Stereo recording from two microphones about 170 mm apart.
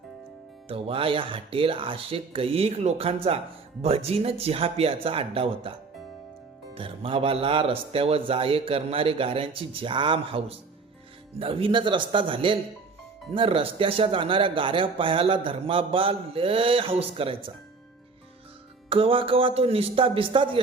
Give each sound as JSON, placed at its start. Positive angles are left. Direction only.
{"t": 0.7, "sound": "speech", "side_deg": -30}
{"t": 6.7, "sound": "speech", "side_deg": -30}
{"t": 18.9, "sound": "speech", "side_deg": -30}